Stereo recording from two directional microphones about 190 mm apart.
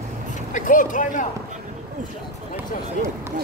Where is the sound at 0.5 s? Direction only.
45° left (ahead or behind).